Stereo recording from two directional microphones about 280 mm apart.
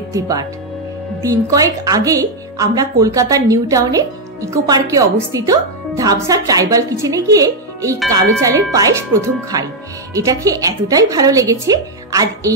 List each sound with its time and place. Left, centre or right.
0.1 s a woman's voice: centre